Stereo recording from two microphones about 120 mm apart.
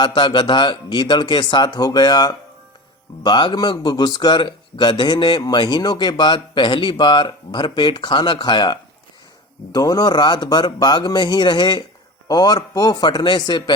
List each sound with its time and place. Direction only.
0.0 s speech: 40° left (ahead or behind)